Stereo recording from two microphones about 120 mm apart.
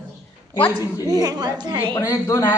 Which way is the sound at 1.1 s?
30° right (ahead or behind).